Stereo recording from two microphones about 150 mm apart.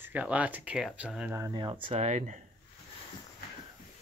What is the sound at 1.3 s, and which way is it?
Speech, 25° right (ahead or behind).